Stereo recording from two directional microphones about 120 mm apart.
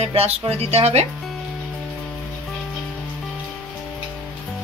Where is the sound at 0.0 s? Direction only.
60° right (ahead or behind).